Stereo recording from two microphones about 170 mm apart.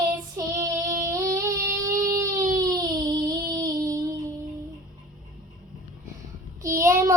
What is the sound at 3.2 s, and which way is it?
Child singing, 20° right (ahead or behind).